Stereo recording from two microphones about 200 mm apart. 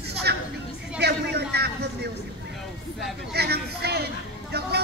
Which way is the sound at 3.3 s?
55° right (ahead or behind).